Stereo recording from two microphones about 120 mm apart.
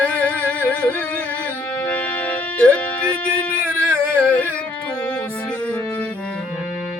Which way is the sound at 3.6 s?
20° right (ahead or behind).